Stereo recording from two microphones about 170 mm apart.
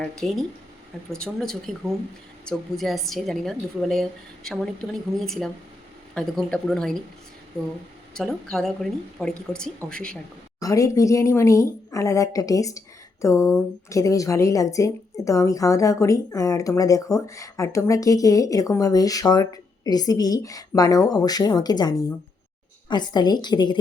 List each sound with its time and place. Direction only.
0.0 s a woman's voice: centre (ahead or behind)
8.1 s a woman's voice: 5° left (ahead or behind)
10.6 s a woman's voice: 20° left (ahead or behind)